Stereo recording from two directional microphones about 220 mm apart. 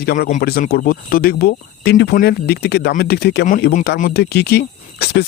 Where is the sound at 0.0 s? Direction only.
40° left (ahead or behind).